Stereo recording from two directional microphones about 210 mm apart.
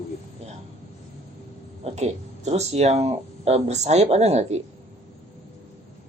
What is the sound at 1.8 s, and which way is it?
Speech, 30° right (ahead or behind).